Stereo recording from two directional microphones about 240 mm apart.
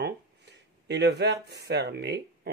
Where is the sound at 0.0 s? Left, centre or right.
Right.